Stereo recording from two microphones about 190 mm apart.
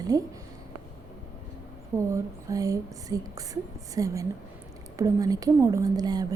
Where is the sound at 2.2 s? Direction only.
20° right (ahead or behind).